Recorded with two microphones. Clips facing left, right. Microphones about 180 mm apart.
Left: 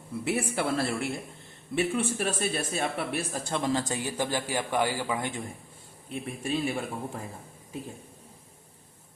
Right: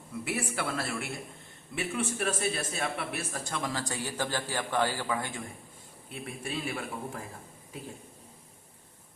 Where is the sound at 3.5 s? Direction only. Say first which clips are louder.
Left 7 dB; 25° left (ahead or behind).